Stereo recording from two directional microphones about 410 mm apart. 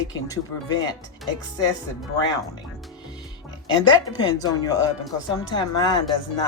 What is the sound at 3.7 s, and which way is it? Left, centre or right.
Speech, centre.